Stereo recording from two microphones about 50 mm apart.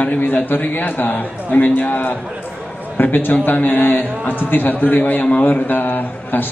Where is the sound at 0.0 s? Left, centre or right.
Left.